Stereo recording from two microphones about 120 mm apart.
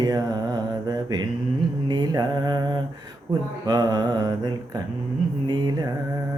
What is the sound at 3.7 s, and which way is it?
Mantra, 35° right (ahead or behind).